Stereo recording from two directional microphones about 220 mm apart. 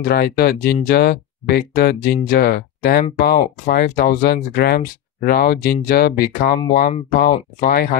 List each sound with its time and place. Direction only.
0.1 s speech: 45° left (ahead or behind)